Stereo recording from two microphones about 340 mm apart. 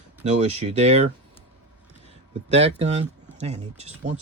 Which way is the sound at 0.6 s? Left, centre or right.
Centre.